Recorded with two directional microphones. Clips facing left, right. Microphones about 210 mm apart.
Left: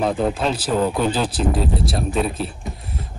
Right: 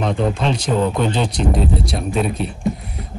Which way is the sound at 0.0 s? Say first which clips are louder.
Even; 5° left (ahead or behind).